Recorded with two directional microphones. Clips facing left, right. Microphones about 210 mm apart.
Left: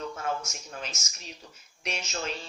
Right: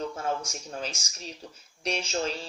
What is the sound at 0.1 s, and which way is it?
Speech, 30° right (ahead or behind).